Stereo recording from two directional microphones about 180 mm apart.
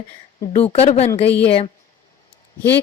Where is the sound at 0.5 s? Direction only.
35° left (ahead or behind).